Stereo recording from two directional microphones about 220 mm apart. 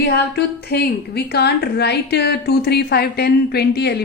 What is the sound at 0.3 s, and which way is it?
A woman's voice, 45° left (ahead or behind).